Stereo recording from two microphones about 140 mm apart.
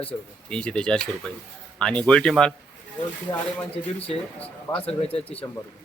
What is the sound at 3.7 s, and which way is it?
Speech, 45° left (ahead or behind).